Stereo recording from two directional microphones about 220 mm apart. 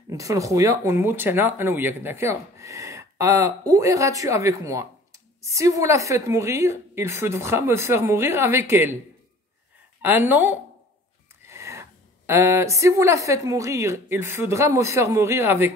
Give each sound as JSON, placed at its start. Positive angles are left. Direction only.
{"t": 0.1, "sound": "speech", "side_deg": -15}
{"t": 10.0, "sound": "speech", "side_deg": -10}